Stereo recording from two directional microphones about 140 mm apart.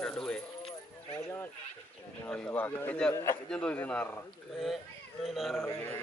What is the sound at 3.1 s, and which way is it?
Speech, 20° left (ahead or behind).